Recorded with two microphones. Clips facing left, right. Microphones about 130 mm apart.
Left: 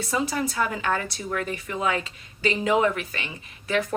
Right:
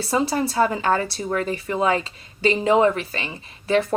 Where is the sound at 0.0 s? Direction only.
30° right (ahead or behind).